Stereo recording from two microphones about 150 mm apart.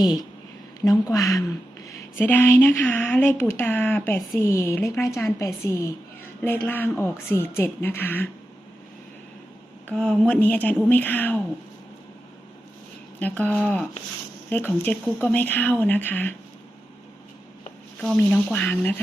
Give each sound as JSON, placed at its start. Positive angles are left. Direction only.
{"t": 0.0, "sound": "speech", "side_deg": 25}
{"t": 9.9, "sound": "speech", "side_deg": 5}
{"t": 13.1, "sound": "speech", "side_deg": 10}
{"t": 18.0, "sound": "speech", "side_deg": 5}